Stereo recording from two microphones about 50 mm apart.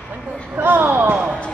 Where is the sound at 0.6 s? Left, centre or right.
Right.